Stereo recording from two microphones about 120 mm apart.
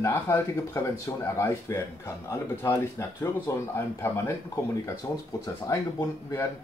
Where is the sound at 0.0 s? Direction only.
20° left (ahead or behind).